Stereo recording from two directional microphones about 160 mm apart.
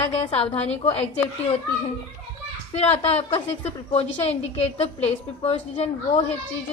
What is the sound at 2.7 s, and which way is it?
A woman's voice, 40° left (ahead or behind).